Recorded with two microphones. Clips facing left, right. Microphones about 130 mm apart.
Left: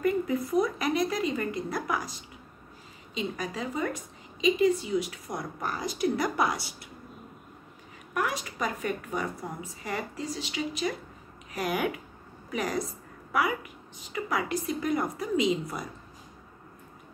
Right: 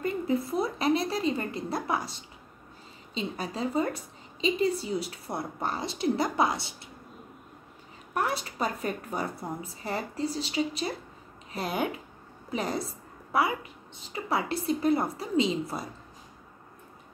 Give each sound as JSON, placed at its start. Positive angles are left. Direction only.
{"t": 0.0, "sound": "a sound", "side_deg": -30}
{"t": 3.2, "sound": "a woman's voice", "side_deg": -30}
{"t": 8.1, "sound": "a woman's voice", "side_deg": -35}